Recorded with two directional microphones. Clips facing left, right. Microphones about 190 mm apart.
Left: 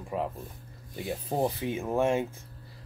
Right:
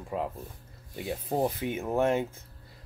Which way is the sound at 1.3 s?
Centre (ahead or behind).